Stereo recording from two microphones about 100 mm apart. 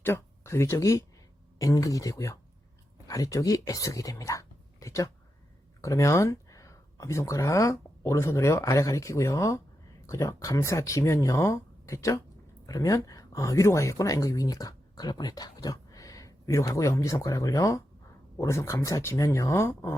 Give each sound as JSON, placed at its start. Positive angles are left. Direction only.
{"t": 0.0, "sound": "speech", "side_deg": 25}